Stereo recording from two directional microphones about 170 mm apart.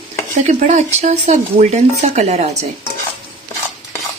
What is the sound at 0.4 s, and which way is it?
Speech, 45° right (ahead or behind).